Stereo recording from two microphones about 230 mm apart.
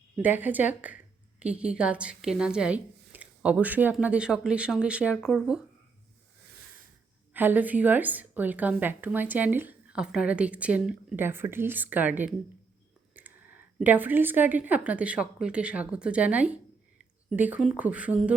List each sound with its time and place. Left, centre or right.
0.2 s a woman's voice: centre
7.3 s a woman's voice: centre